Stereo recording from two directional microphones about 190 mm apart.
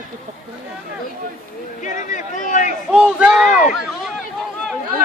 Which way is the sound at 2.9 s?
5° right (ahead or behind).